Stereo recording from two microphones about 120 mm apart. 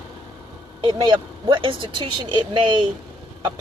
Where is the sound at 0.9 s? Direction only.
35° right (ahead or behind).